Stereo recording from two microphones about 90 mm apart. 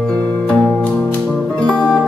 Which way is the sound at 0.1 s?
15° left (ahead or behind).